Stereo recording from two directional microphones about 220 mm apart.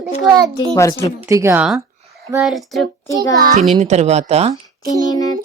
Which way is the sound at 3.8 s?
30° right (ahead or behind).